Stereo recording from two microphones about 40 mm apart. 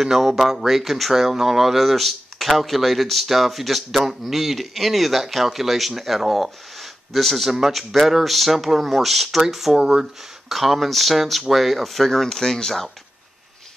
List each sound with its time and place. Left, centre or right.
0.0 s speech: centre
9.8 s speech: centre
10.5 s speech: centre